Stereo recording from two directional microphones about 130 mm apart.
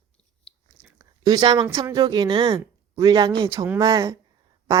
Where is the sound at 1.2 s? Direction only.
30° right (ahead or behind).